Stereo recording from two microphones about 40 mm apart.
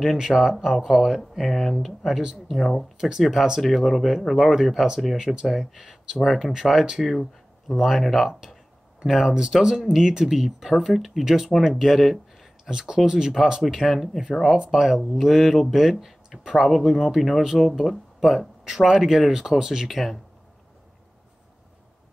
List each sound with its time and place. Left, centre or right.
0.2 s speech: centre
3.6 s speech: centre
4.8 s speech: centre
8.3 s speech: centre
12.6 s speech: centre
13.7 s speech: centre
14.7 s speech: centre